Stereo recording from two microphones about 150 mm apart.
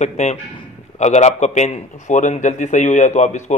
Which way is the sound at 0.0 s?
50° left (ahead or behind).